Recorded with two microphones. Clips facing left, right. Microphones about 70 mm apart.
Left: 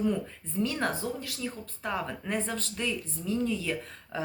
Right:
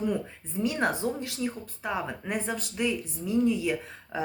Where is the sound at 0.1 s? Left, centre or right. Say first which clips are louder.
Right 1 dB; centre.